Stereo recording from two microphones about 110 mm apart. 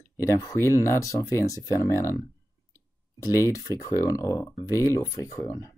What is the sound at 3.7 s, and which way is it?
Speech, 30° left (ahead or behind).